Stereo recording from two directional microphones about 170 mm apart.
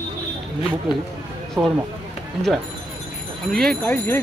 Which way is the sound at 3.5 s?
5° left (ahead or behind).